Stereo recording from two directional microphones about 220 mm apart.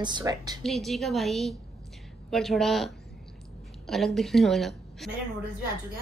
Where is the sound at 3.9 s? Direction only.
Centre (ahead or behind).